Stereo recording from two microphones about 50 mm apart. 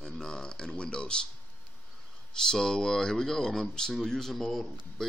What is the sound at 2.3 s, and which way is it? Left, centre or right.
Speech, centre.